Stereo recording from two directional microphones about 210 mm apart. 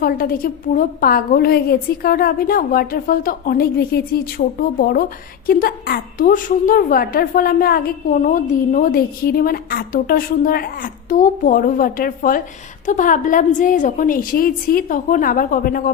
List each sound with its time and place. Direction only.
0.0 s a woman's voice: 45° left (ahead or behind)